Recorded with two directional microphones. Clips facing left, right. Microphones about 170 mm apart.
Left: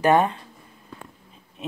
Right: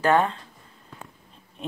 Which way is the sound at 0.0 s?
15° left (ahead or behind).